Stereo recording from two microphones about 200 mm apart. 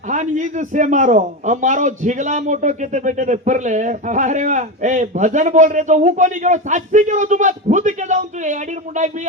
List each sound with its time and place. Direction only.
0.1 s a man's voice: 40° right (ahead or behind)